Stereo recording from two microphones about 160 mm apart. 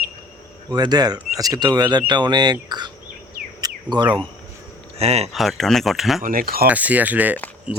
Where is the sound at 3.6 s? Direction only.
25° right (ahead or behind).